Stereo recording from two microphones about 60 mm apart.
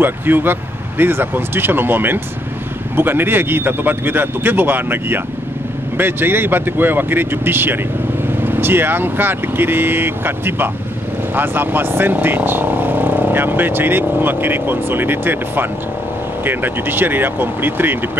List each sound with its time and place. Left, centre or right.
0.0 s speech: right